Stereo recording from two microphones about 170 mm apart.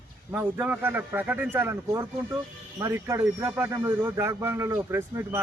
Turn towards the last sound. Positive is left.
turn(degrees=-15)  # may be behind; listen again after turning